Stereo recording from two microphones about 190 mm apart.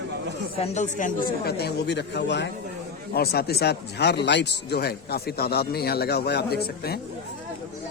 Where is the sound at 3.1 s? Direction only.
55° left (ahead or behind).